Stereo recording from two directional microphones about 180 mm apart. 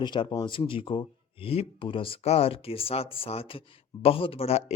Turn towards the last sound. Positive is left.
turn(degrees=35)  # may be behind; listen again after turning